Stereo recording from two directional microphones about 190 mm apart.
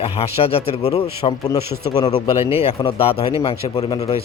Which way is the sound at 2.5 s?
30° left (ahead or behind).